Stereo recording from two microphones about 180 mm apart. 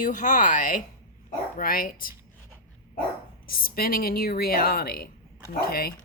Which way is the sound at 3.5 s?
55° left (ahead or behind).